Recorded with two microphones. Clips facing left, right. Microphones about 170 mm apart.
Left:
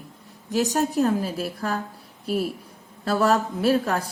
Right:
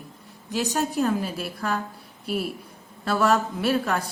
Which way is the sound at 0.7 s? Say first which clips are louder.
Left 1 dB; 40° left (ahead or behind).